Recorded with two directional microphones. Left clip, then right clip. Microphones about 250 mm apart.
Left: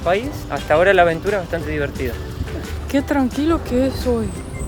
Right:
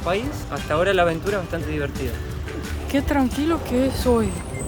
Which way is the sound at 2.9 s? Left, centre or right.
Centre.